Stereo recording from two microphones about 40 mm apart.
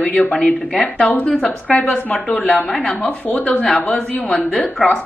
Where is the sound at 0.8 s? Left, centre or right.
Left.